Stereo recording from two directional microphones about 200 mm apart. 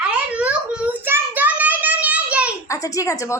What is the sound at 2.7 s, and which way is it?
Speech, 15° left (ahead or behind).